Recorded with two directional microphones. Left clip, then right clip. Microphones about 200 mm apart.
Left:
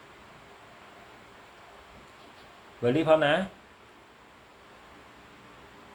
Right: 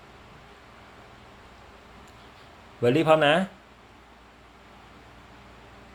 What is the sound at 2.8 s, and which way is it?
Speech, 55° right (ahead or behind).